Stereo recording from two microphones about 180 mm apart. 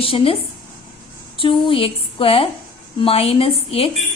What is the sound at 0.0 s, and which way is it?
Speech, 30° left (ahead or behind).